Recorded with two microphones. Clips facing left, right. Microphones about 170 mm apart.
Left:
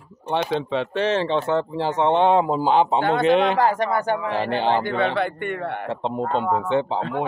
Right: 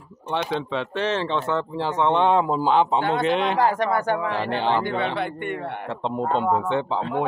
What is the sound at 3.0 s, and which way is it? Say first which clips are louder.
Speech: left 2 dB; 50° left (ahead or behind).